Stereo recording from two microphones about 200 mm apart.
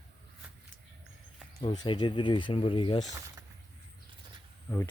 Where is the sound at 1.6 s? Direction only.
20° left (ahead or behind).